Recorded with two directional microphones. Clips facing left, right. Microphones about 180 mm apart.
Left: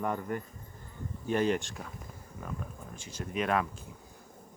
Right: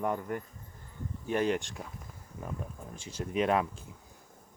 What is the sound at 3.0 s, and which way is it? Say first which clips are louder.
Speech: right 3 dB; 30° right (ahead or behind).